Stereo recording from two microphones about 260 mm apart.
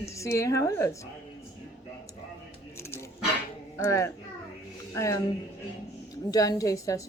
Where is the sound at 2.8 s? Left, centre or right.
Centre.